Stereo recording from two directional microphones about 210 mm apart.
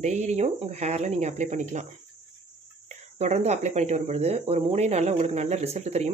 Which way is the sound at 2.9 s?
35° right (ahead or behind).